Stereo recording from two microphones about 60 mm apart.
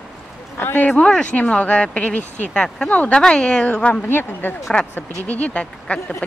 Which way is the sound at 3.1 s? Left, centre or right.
Centre.